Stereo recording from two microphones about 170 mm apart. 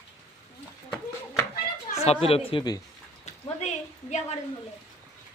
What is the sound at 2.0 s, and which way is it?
Speech, 35° left (ahead or behind).